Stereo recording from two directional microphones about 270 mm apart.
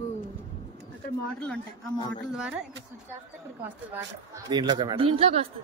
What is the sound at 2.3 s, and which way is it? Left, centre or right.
Speech, centre.